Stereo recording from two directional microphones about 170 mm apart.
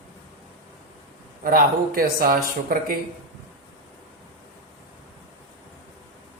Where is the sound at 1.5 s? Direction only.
55° right (ahead or behind).